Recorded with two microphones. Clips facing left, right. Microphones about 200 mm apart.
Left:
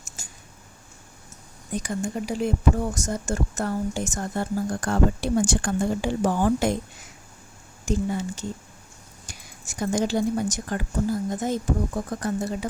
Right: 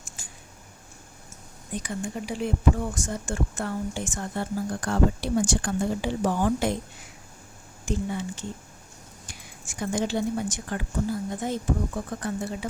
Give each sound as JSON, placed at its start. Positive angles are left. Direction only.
{"t": 0.2, "sound": "a sound", "side_deg": 40}
{"t": 1.7, "sound": "speech", "side_deg": 45}
{"t": 7.9, "sound": "a woman's voice", "side_deg": 40}